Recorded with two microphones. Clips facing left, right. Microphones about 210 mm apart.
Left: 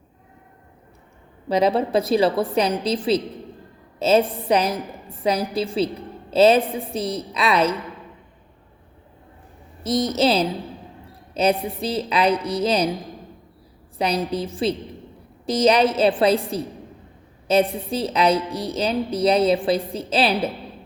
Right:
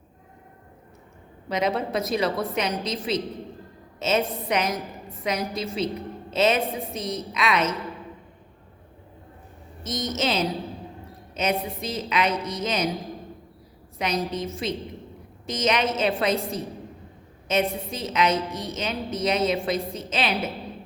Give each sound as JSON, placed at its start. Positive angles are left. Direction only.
{"t": 1.5, "sound": "a woman's voice", "side_deg": 35}
{"t": 9.8, "sound": "a woman's voice", "side_deg": 35}
{"t": 14.0, "sound": "a woman's voice", "side_deg": 35}